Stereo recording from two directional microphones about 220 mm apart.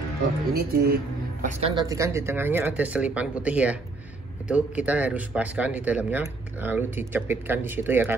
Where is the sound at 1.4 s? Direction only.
35° right (ahead or behind).